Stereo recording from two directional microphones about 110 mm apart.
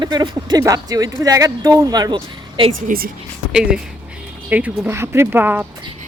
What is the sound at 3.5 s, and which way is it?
Speech, 5° right (ahead or behind).